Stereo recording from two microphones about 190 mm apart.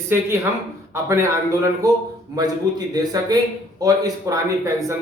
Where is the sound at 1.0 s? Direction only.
15° right (ahead or behind).